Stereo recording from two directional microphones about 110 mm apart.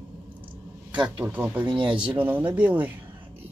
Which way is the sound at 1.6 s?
50° right (ahead or behind).